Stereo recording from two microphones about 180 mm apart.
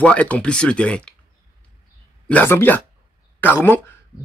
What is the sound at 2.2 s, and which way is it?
Speech, 10° left (ahead or behind).